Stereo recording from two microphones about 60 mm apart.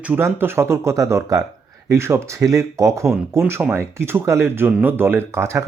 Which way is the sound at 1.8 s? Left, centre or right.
Right.